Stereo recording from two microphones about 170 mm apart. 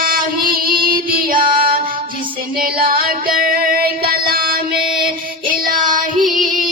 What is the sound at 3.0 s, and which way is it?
Music, 60° right (ahead or behind).